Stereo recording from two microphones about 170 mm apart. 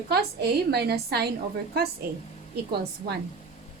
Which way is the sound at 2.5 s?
70° right (ahead or behind).